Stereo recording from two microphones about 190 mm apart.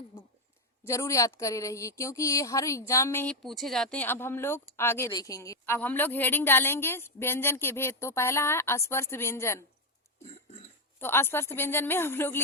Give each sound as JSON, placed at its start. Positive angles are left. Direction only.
{"t": 0.9, "sound": "a woman's voice", "side_deg": 15}
{"t": 11.0, "sound": "a woman's voice", "side_deg": 10}